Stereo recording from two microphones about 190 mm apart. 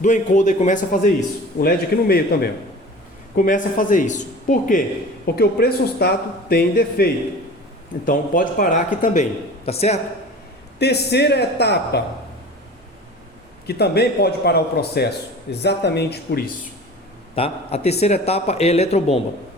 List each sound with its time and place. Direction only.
0.0 s a man's voice: 40° left (ahead or behind)
1.5 s speech: 55° left (ahead or behind)
5.2 s a man's voice: 55° left (ahead or behind); by 10.0 s 35° left (ahead or behind)
10.8 s speech: 60° left (ahead or behind)
13.7 s speech: 60° left (ahead or behind)
17.3 s a man's voice: 30° left (ahead or behind)